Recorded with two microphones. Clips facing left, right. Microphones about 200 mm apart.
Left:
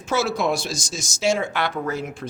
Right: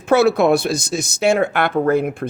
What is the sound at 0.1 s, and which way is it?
Speech, 60° right (ahead or behind).